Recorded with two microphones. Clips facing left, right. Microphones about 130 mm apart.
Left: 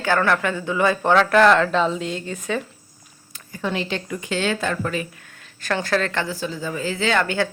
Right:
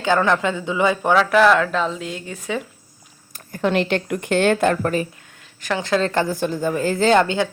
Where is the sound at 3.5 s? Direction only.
65° right (ahead or behind).